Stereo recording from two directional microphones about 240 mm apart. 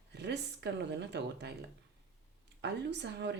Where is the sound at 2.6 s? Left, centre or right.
Right.